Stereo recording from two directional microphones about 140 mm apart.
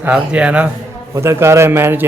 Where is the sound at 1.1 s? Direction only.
20° right (ahead or behind).